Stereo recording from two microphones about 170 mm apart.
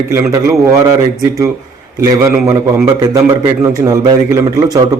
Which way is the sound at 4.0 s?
20° right (ahead or behind).